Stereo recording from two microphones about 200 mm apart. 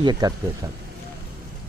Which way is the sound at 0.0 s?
20° right (ahead or behind).